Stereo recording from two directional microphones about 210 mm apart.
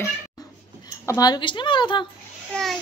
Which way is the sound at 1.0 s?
15° left (ahead or behind).